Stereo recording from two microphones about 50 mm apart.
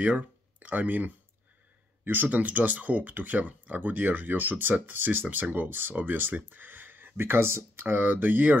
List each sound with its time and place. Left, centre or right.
0.0 s speech: right